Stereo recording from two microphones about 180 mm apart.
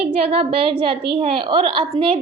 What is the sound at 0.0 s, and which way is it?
A woman's voice, 35° right (ahead or behind).